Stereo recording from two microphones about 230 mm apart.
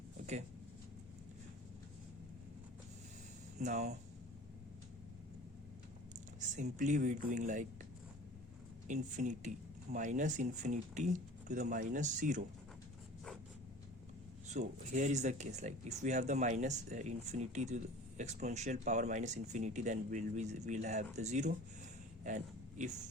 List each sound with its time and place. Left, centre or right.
3.6 s speech: right
6.6 s speech: right
8.9 s speech: right
14.4 s speech: right
22.2 s a sound: right